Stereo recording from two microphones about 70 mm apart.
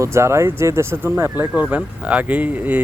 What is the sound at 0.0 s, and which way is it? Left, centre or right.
Speech, right.